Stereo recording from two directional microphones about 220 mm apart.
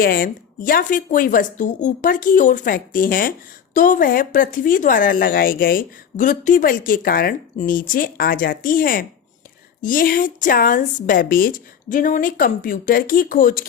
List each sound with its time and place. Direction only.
0.0 s speech: 40° left (ahead or behind)